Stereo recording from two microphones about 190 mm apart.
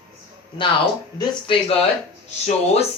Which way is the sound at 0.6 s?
25° left (ahead or behind).